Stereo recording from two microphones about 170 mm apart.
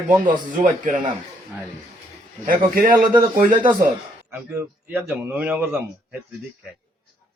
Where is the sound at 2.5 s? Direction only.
55° right (ahead or behind).